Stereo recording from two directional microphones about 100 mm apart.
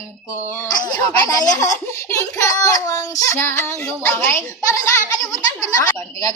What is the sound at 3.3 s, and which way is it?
A woman's voice, 25° left (ahead or behind).